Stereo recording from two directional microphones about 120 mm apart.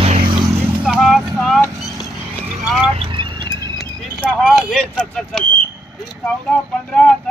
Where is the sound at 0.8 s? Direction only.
5° right (ahead or behind).